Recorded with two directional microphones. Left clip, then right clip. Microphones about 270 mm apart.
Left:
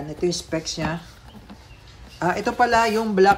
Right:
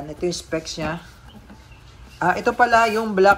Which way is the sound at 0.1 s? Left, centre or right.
Centre.